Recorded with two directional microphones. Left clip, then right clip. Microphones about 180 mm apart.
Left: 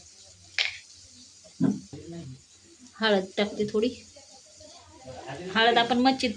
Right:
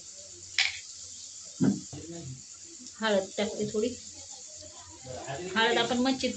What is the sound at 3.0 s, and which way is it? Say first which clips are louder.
Speech: left 3 dB; 70° left (ahead or behind).